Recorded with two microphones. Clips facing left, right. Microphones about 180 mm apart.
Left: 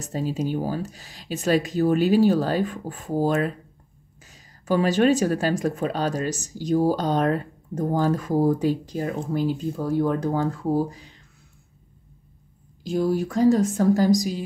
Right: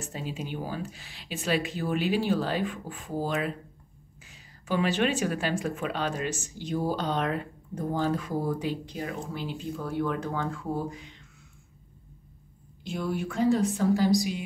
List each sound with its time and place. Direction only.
0.0 s a woman's voice: 40° left (ahead or behind)
12.8 s a woman's voice: 35° left (ahead or behind)